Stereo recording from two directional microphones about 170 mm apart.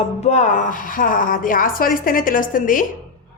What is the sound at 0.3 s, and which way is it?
A woman's voice, 45° left (ahead or behind).